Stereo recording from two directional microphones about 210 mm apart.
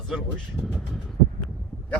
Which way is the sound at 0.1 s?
Centre (ahead or behind).